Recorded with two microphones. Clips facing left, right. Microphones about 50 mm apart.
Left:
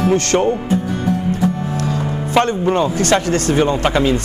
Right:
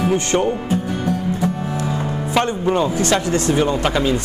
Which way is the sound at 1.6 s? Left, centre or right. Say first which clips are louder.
Left 2 dB; right.